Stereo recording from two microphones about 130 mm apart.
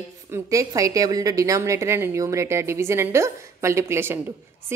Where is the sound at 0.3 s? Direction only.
25° right (ahead or behind).